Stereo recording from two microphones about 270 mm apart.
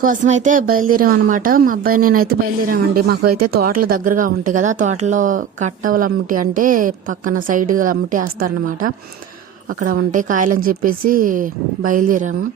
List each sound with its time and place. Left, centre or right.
0.0 s speech: right